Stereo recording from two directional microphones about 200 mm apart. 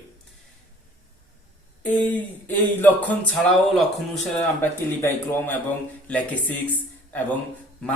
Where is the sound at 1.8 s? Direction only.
10° left (ahead or behind).